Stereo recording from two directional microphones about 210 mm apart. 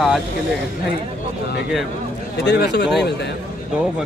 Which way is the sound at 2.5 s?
55° left (ahead or behind).